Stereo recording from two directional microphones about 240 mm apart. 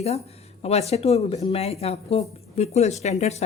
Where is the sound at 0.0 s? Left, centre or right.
Left.